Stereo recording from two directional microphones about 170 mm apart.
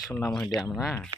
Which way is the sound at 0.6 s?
15° left (ahead or behind).